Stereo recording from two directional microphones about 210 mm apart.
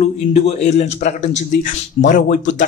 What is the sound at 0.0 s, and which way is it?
Speech, 30° left (ahead or behind).